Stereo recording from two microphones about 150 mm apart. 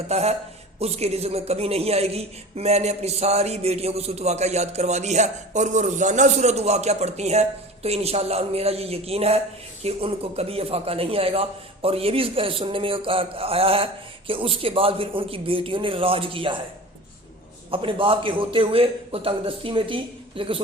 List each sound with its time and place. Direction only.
0.1 s a woman's voice: 45° right (ahead or behind)
17.7 s a man's voice: 35° right (ahead or behind)